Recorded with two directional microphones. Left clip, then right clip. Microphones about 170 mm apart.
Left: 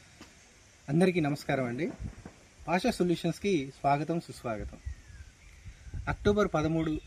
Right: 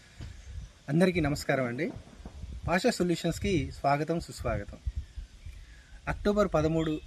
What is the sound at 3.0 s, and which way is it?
Speech, centre (ahead or behind).